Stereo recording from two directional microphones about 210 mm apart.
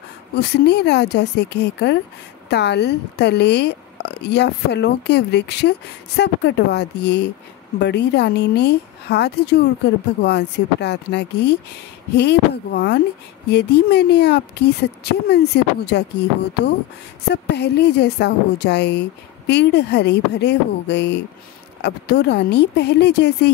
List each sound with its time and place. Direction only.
0.4 s a woman's voice: 55° left (ahead or behind)